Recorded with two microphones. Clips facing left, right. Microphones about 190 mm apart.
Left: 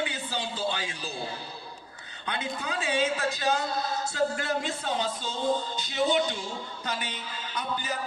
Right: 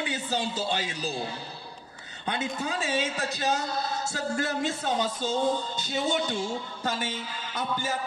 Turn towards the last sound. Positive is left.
turn(degrees=-45)  # may be behind; listen again after turning